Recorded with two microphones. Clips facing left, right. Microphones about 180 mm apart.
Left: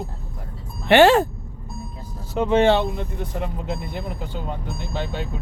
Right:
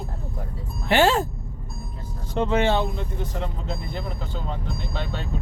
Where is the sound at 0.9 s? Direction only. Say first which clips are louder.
Left 6 dB; 65° left (ahead or behind).